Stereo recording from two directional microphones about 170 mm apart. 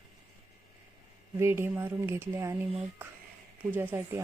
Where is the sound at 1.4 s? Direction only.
15° right (ahead or behind).